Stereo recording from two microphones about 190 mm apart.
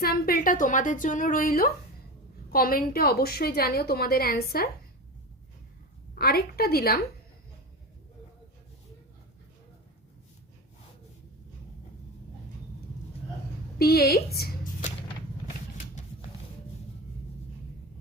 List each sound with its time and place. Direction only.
0.0 s a woman's voice: 50° left (ahead or behind)
6.1 s a woman's voice: 55° left (ahead or behind)
13.7 s speech: 55° left (ahead or behind)